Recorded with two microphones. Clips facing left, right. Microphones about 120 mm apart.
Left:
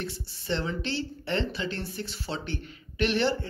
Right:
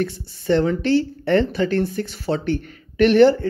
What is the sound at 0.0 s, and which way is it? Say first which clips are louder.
Speech: right 12 dB; 50° right (ahead or behind).